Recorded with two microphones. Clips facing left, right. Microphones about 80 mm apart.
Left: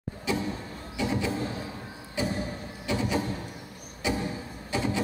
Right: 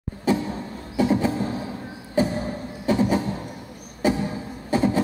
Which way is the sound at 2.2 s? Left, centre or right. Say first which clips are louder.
Right 8 dB; right.